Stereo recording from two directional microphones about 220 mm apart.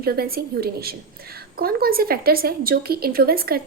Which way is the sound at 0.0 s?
45° right (ahead or behind).